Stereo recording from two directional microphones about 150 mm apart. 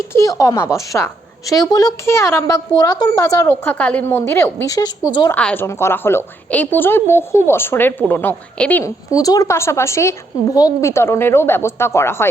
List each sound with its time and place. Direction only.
0.1 s a woman's voice: 20° left (ahead or behind)
5.3 s a woman's voice: 10° left (ahead or behind)
8.8 s a woman's voice: 25° left (ahead or behind)